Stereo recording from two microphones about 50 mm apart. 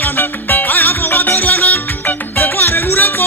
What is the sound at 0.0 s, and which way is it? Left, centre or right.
Music, left.